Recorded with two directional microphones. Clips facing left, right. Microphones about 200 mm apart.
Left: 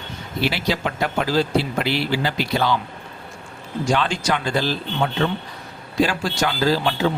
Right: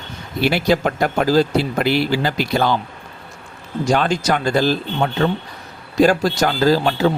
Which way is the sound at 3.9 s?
40° right (ahead or behind).